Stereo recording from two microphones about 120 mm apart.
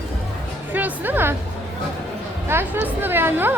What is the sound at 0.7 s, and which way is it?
Music, 15° right (ahead or behind).